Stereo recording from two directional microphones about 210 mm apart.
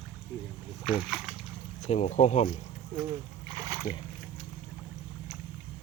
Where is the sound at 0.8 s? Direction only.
Centre (ahead or behind).